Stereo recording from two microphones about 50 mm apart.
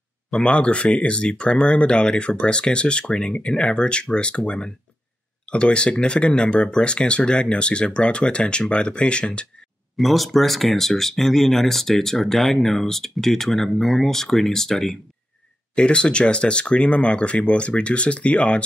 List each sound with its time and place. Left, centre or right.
0.4 s speech: left
9.9 s speech: centre
15.7 s speech: left